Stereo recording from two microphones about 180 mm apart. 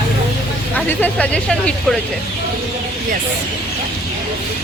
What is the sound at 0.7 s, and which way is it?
Speech, 10° left (ahead or behind).